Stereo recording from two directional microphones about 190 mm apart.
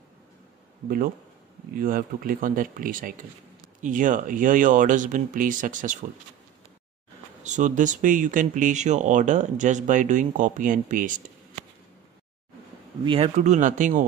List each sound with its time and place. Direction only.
0.8 s speech: 50° right (ahead or behind)
7.4 s speech: 40° right (ahead or behind)
13.0 s speech: 25° right (ahead or behind)
13.4 s speech: 40° right (ahead or behind)